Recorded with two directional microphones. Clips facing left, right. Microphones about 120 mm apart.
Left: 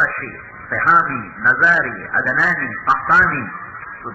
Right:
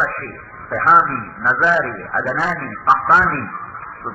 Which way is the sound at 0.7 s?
30° right (ahead or behind).